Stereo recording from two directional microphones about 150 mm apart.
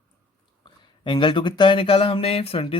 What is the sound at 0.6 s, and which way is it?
Speech, 35° left (ahead or behind).